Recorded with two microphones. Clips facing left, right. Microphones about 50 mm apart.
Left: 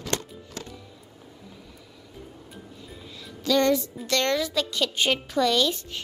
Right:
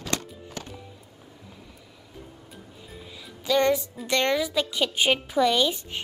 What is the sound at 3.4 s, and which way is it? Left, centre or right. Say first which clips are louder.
Music: even; centre.